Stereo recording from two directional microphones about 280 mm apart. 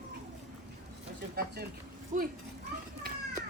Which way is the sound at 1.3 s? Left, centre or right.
Right.